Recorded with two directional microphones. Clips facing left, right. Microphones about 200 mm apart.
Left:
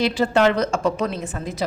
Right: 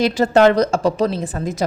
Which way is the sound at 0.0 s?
45° right (ahead or behind).